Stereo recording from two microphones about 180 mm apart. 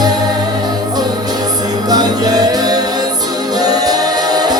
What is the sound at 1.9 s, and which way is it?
Music, 20° right (ahead or behind).